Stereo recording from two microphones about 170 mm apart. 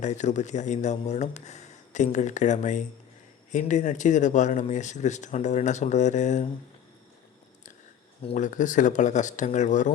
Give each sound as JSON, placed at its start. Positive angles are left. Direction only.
{"t": 0.0, "sound": "speech", "side_deg": 45}
{"t": 8.2, "sound": "speech", "side_deg": 35}
{"t": 8.4, "sound": "speech", "side_deg": 50}